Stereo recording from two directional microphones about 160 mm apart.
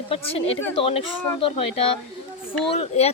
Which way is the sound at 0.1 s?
35° left (ahead or behind).